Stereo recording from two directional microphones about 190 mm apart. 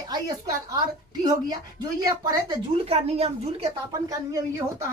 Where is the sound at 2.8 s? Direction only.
30° right (ahead or behind).